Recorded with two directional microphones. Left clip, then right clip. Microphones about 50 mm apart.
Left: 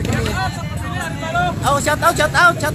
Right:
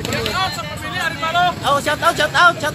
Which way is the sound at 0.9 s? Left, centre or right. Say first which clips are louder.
Right 3 dB; centre.